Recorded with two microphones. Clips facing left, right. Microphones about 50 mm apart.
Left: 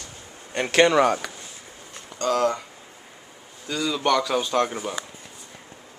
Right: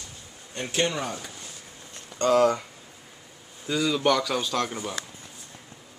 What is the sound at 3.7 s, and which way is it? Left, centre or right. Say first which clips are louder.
Speech: right 1 dB; centre.